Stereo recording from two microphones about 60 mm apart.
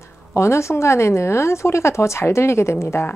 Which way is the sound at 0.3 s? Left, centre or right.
Left.